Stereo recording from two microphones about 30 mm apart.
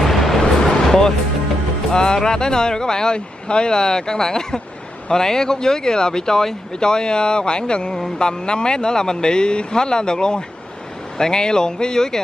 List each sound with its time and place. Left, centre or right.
0.0 s vehicle: centre
0.4 s vehicle: centre
1.9 s speech: left